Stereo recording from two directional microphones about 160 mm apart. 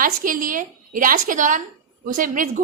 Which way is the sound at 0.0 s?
60° right (ahead or behind).